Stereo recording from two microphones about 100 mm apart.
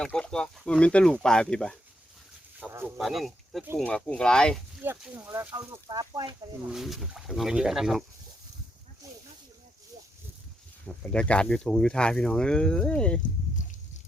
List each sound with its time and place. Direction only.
0.0 s speech: 10° left (ahead or behind)
2.6 s speech: 20° right (ahead or behind)
3.0 s speech: centre (ahead or behind)
3.8 s speech: 15° left (ahead or behind)
4.9 s speech: 15° right (ahead or behind)
5.3 s speech: 25° right (ahead or behind)
6.7 s speech: 5° right (ahead or behind)
9.0 s snake: 30° right (ahead or behind)
10.8 s speech: 10° left (ahead or behind)